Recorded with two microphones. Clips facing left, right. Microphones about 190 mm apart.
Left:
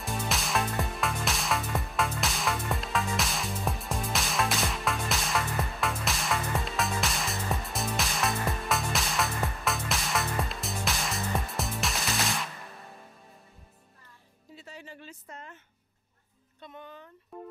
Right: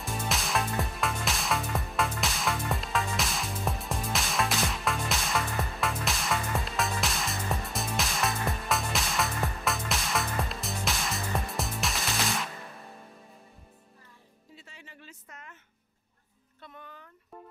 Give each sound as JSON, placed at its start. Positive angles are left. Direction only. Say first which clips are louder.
{"t": 0.0, "sound": "music", "louder": "even", "side_deg": 0}
{"t": 14.6, "sound": "a sound", "louder": "left 8 dB", "side_deg": 40}
{"t": 16.6, "sound": "music", "louder": "left 3 dB", "side_deg": 20}